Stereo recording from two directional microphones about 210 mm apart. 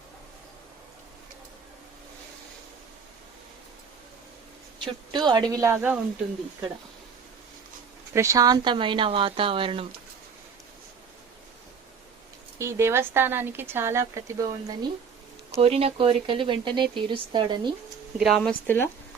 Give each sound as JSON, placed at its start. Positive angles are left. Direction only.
{"t": 4.8, "sound": "speech", "side_deg": -20}
{"t": 8.1, "sound": "speech", "side_deg": -15}
{"t": 12.5, "sound": "speech", "side_deg": -15}
{"t": 18.2, "sound": "speech", "side_deg": 0}